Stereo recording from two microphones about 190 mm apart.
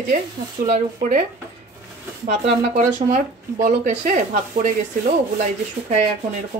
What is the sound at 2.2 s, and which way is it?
Speech, 35° right (ahead or behind).